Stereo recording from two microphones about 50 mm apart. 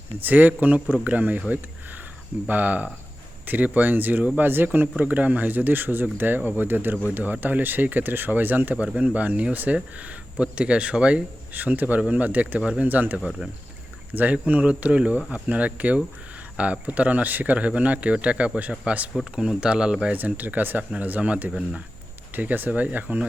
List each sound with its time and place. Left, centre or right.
0.2 s speech: right
11.5 s speech: right; by 20.1 s centre
20.1 s speech: right